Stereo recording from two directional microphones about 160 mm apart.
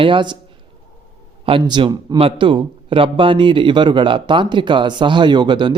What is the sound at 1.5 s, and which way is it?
A man's voice, 30° right (ahead or behind).